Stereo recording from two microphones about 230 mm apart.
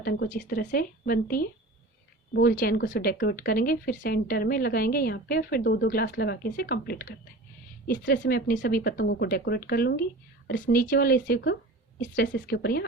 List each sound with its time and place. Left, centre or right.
0.0 s speech: left